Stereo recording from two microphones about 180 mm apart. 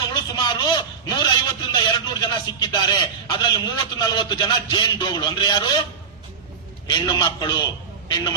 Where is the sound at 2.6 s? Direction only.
25° left (ahead or behind).